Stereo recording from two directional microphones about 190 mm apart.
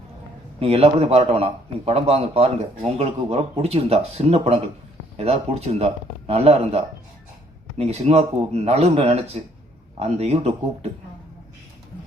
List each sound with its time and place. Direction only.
0.6 s a man's voice: 30° right (ahead or behind)